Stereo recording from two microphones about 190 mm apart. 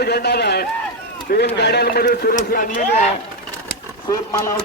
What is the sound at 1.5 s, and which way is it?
Speech, 60° left (ahead or behind).